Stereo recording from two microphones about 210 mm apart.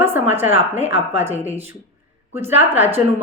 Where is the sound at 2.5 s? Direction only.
10° right (ahead or behind).